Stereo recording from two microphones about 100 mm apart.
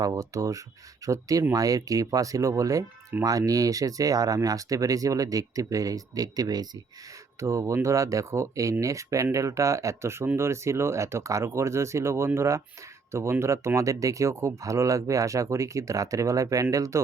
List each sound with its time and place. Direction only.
0.0 s speech: 35° right (ahead or behind)
7.3 s speech: 30° right (ahead or behind)